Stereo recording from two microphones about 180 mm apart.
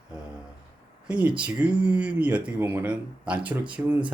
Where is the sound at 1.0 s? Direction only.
5° right (ahead or behind).